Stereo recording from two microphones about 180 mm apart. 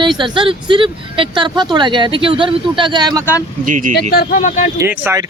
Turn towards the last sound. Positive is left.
turn(degrees=-15)  # may be behind; listen again after turning